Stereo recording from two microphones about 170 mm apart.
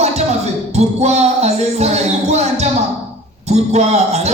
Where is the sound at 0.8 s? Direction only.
40° right (ahead or behind).